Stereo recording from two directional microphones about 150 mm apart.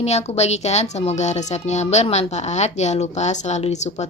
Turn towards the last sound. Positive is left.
turn(degrees=50)  # may be behind; listen again after turning